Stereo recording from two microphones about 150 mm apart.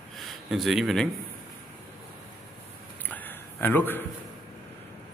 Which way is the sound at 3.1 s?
10° left (ahead or behind).